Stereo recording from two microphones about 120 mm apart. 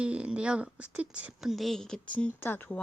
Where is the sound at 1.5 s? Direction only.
Centre (ahead or behind).